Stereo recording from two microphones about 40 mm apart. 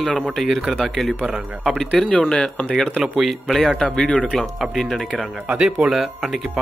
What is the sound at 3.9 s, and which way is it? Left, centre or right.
Speech, left.